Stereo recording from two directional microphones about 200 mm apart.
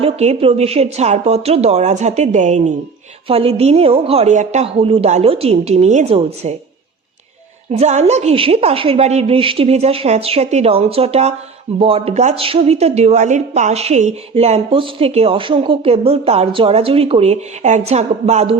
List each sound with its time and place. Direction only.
0.0 s a woman's voice: 30° right (ahead or behind)
7.7 s a woman's voice: 35° right (ahead or behind)